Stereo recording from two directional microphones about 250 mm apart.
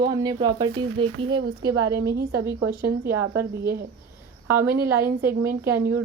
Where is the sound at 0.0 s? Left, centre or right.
Centre.